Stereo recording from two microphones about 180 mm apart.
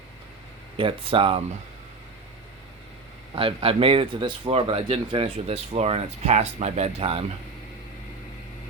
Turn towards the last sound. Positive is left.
turn(degrees=-35)  # may be behind; listen again after turning